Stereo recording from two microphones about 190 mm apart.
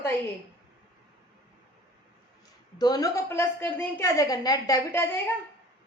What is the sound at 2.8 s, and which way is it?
A woman's voice, 20° left (ahead or behind).